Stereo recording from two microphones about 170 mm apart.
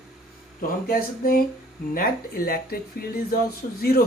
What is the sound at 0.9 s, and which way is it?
Speech, 60° left (ahead or behind).